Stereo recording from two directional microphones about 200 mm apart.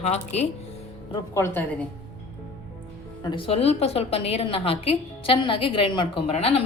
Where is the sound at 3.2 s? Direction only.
25° left (ahead or behind).